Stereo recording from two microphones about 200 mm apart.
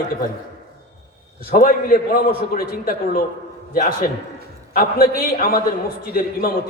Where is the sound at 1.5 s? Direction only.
45° left (ahead or behind).